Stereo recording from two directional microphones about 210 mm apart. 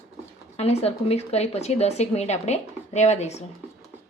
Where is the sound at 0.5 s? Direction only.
30° left (ahead or behind).